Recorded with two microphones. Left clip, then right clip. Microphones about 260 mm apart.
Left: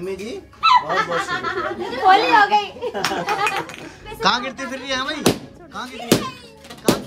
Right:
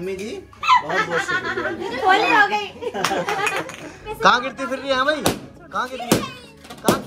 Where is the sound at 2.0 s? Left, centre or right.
Left.